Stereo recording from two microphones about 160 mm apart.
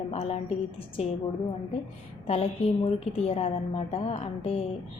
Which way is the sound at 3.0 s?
40° left (ahead or behind).